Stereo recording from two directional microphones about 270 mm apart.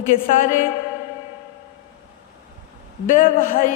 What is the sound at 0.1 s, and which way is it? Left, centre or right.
Speech, left.